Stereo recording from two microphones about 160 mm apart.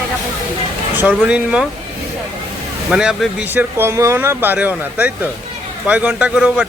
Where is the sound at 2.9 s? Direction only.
5° right (ahead or behind).